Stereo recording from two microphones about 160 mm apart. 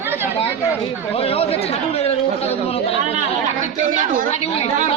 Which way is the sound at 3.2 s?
55° right (ahead or behind).